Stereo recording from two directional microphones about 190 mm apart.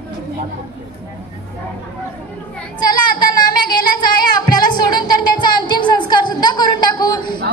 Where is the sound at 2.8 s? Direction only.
20° left (ahead or behind).